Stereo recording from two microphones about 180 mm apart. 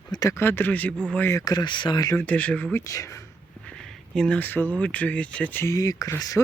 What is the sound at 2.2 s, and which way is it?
Speech, 10° left (ahead or behind).